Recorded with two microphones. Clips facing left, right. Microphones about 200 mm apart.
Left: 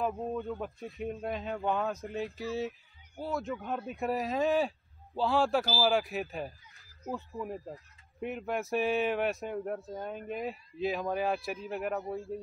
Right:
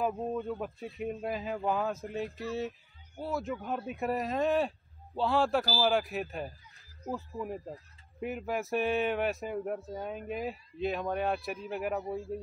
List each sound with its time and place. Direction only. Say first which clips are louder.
0.0 s speech: right 1 dB; centre (ahead or behind)